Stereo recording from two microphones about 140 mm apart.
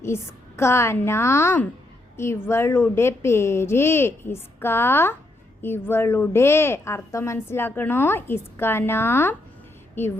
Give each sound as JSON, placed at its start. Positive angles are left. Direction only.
{"t": 0.0, "sound": "a woman's voice", "side_deg": 20}